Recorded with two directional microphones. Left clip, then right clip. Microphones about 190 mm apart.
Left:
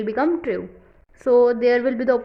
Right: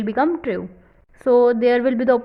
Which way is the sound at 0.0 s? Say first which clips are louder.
Right 1 dB; 20° right (ahead or behind).